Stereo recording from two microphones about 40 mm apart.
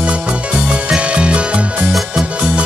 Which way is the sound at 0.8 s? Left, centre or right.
Right.